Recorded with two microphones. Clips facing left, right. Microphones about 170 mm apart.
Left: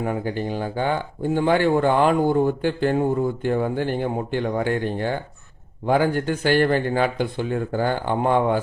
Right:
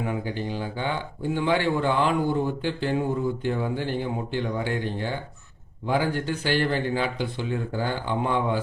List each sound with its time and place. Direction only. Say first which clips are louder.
0.0 s speech: left 4 dB; 50° left (ahead or behind)